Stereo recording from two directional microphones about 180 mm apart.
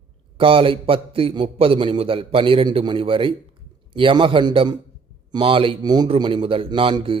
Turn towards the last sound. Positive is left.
turn(degrees=-30)  # may be behind; listen again after turning